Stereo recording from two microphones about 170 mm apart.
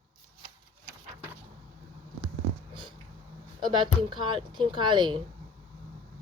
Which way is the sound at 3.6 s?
25° right (ahead or behind).